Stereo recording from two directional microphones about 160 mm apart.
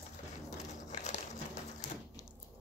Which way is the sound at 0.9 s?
50° left (ahead or behind).